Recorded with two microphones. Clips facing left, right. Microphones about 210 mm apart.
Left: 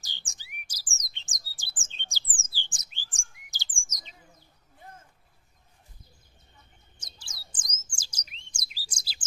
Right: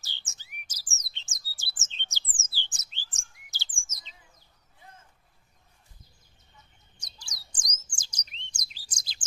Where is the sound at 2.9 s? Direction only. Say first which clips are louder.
Left 1 dB; 15° left (ahead or behind).